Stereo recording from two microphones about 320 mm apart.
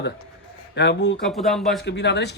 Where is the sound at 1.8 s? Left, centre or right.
Left.